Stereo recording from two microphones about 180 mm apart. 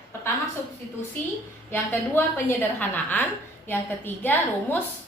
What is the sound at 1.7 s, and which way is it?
A woman's voice, 10° left (ahead or behind).